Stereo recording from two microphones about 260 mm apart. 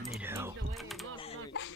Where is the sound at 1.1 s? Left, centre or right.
Centre.